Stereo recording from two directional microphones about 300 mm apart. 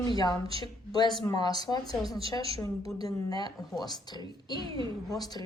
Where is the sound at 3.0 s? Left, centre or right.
Centre.